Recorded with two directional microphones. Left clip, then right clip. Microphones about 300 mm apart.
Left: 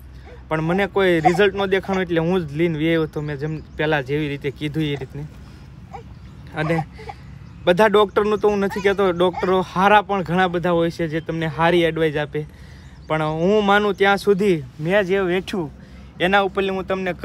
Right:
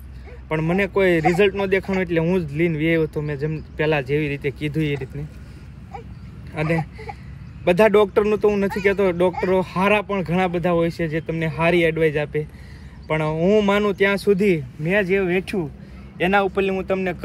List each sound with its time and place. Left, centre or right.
0.5 s speech: centre
6.7 s speech: left
7.6 s speech: centre